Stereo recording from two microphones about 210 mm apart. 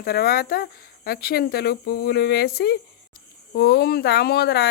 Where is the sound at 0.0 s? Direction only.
50° left (ahead or behind).